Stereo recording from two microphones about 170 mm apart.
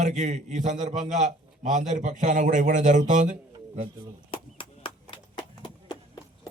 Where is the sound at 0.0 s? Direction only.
45° right (ahead or behind).